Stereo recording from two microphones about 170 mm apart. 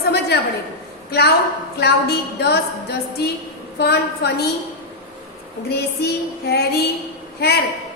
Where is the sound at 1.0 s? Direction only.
70° left (ahead or behind).